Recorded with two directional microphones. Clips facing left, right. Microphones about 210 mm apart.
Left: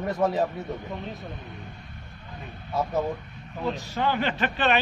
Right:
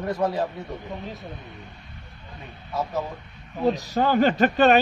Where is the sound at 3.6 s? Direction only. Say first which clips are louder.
Right 6 dB; 40° right (ahead or behind).